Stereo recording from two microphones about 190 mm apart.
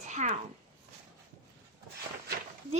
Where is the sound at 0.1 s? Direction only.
40° right (ahead or behind).